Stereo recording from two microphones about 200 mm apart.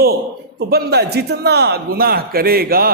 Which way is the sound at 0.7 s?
55° right (ahead or behind).